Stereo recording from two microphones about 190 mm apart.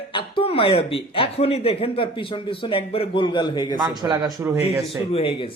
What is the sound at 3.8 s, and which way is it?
Speech, 20° right (ahead or behind).